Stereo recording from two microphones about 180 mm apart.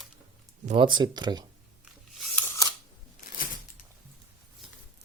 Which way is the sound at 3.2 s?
50° left (ahead or behind).